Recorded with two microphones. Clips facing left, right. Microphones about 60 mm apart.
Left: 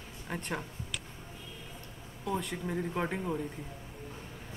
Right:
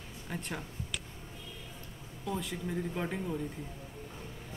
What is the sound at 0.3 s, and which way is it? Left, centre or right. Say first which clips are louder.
Speech: left 2 dB; centre.